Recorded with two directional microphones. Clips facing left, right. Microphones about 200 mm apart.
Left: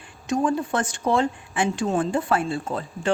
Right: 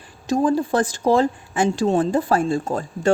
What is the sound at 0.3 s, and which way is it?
Speech, 35° right (ahead or behind).